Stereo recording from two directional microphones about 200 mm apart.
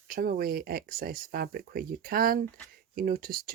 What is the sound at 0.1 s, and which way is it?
Speech, 45° right (ahead or behind).